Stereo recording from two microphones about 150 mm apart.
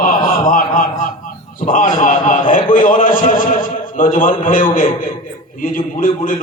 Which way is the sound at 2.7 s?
60° left (ahead or behind).